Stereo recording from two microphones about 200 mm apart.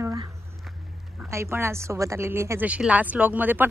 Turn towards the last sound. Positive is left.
turn(degrees=-10)  # may be behind; listen again after turning